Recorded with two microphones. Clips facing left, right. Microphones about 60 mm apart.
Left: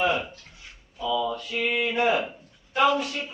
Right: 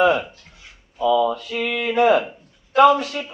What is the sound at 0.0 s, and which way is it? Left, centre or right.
A man's voice, right.